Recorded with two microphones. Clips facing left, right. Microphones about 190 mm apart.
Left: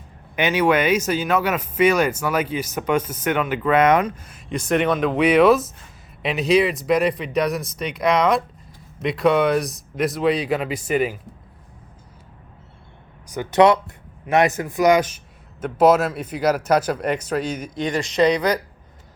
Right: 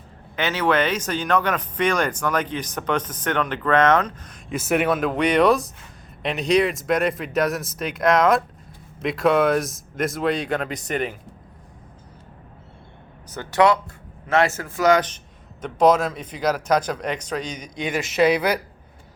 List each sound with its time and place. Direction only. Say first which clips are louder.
0.3 s speech: left 3 dB; 15° left (ahead or behind)
4.4 s speech: left 1 dB; 5° right (ahead or behind)
13.3 s speech: left 3 dB; 20° left (ahead or behind); by 18.6 s 10° right (ahead or behind)